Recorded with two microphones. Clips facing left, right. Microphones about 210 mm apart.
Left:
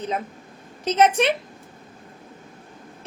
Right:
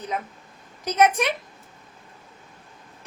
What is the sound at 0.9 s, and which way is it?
Speech, 30° left (ahead or behind).